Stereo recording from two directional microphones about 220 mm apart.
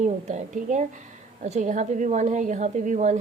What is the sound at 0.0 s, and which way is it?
A woman's voice, 35° right (ahead or behind).